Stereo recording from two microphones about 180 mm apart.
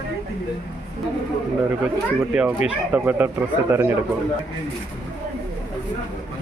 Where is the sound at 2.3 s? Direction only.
5° right (ahead or behind).